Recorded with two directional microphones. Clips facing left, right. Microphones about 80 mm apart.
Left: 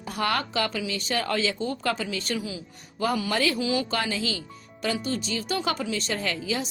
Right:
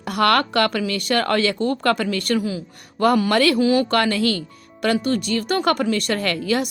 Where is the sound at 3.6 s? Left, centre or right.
Right.